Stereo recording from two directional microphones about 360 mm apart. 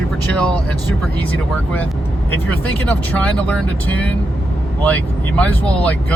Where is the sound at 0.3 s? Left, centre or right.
Centre.